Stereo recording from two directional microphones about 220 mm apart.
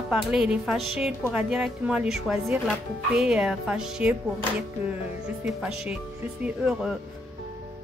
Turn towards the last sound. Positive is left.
turn(degrees=-5)  # may be behind; listen again after turning